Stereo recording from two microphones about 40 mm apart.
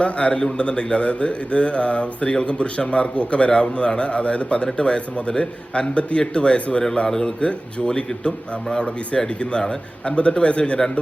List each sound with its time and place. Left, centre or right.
0.0 s a man's voice: left